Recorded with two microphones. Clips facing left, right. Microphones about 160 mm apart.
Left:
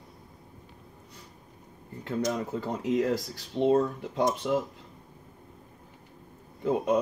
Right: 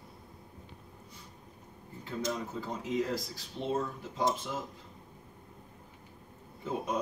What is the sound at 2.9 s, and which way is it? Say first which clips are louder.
Speech: left 6 dB; 75° left (ahead or behind).